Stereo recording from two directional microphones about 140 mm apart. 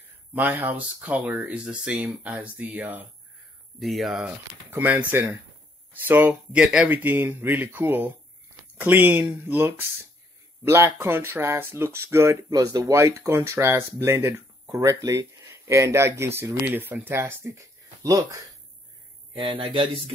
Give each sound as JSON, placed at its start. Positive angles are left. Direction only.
{"t": 0.3, "sound": "speech", "side_deg": -10}
{"t": 3.8, "sound": "speech", "side_deg": 0}
{"t": 4.6, "sound": "speech", "side_deg": -15}
{"t": 19.3, "sound": "speech", "side_deg": -40}